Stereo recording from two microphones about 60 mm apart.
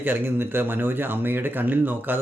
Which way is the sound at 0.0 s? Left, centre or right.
Right.